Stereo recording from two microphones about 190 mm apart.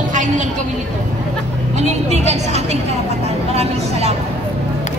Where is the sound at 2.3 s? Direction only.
35° right (ahead or behind).